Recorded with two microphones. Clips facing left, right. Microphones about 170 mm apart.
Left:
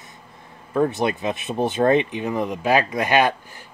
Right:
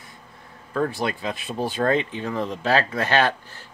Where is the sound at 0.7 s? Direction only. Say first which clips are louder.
Left 4 dB; 20° left (ahead or behind).